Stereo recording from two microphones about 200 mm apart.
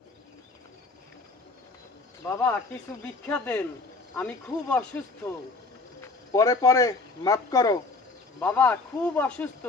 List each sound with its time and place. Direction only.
2.2 s speech: 10° left (ahead or behind)